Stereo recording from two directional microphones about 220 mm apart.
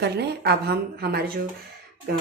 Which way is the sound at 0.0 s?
45° right (ahead or behind).